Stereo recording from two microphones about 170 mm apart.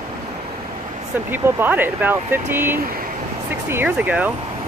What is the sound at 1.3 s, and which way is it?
Speech, 10° right (ahead or behind).